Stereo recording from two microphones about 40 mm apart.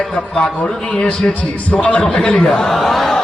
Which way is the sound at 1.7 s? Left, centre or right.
Left.